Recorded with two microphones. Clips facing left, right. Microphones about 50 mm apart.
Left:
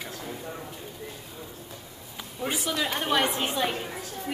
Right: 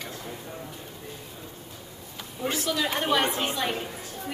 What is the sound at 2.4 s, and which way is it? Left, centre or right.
Speech, centre.